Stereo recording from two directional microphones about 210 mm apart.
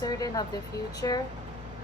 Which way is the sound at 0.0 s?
15° left (ahead or behind).